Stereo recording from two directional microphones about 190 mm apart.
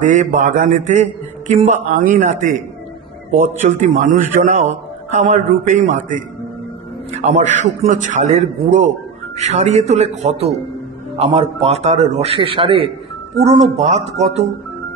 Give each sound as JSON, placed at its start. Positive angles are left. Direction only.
{"t": 0.0, "sound": "a man's voice", "side_deg": -40}